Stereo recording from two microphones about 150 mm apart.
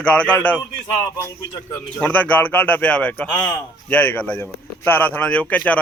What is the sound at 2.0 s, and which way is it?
Speech, 10° left (ahead or behind).